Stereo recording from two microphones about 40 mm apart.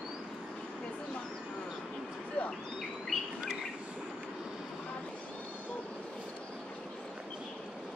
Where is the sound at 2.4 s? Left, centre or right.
Left.